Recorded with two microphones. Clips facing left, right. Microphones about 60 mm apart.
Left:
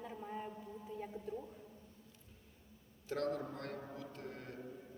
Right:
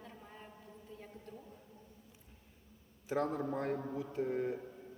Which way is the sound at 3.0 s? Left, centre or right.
Centre.